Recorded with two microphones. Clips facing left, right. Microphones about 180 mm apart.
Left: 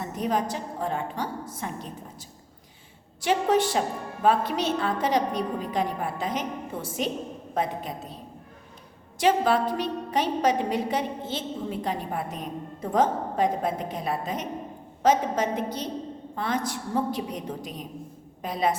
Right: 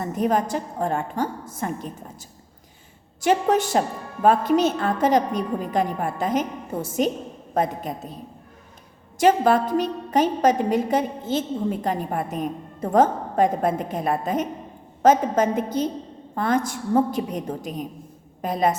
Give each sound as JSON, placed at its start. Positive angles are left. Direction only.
{"t": 0.0, "sound": "a woman's voice", "side_deg": -50}
{"t": 3.2, "sound": "a woman's voice", "side_deg": -45}
{"t": 9.1, "sound": "a woman's voice", "side_deg": -45}